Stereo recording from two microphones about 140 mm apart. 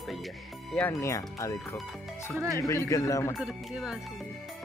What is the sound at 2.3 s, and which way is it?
Speech, 25° right (ahead or behind).